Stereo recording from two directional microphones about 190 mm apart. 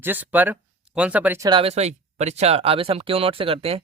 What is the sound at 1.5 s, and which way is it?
Speech, 30° right (ahead or behind).